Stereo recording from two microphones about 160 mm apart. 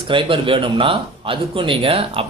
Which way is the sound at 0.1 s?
30° right (ahead or behind).